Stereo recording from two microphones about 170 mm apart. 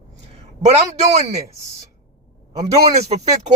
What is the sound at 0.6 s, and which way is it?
Speech, 40° right (ahead or behind).